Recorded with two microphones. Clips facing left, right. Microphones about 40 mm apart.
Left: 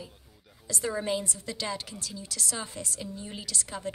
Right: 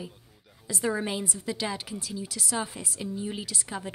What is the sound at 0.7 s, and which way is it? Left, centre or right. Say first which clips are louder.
A woman's voice: right 1 dB; centre.